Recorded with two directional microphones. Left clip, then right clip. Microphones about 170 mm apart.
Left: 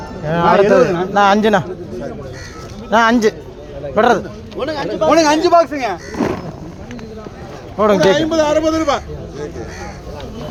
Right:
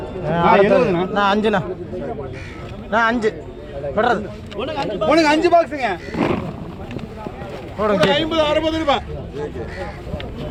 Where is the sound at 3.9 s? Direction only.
70° left (ahead or behind).